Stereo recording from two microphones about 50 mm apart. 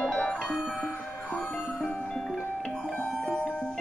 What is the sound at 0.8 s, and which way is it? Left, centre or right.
Music, left.